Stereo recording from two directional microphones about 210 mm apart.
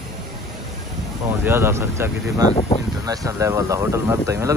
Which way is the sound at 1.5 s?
10° right (ahead or behind).